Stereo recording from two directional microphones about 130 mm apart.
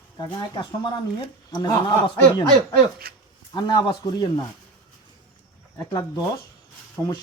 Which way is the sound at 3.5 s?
35° left (ahead or behind).